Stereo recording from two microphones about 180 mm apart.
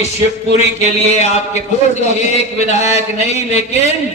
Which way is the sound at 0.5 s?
35° left (ahead or behind).